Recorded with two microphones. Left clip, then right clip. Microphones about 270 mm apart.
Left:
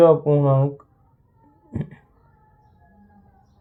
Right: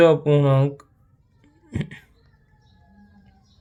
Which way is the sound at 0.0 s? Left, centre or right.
Right.